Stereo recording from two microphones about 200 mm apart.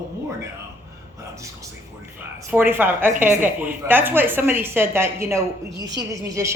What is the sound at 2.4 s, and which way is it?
A woman's voice, 10° right (ahead or behind).